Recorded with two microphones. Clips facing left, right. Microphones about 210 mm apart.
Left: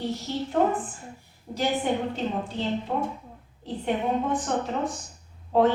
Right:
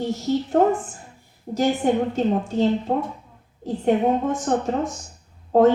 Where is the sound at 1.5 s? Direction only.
45° right (ahead or behind).